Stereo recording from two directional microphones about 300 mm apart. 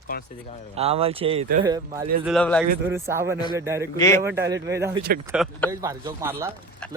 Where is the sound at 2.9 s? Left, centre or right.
Centre.